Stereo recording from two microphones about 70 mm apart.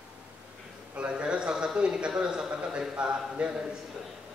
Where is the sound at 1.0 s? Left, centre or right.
Centre.